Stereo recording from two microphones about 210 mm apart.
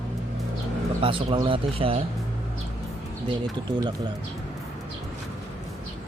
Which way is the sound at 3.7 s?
20° right (ahead or behind).